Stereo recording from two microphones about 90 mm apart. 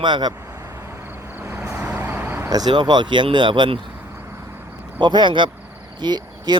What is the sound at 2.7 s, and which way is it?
Speech, 55° right (ahead or behind).